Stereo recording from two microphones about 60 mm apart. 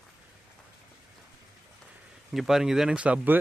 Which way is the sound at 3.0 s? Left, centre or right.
Centre.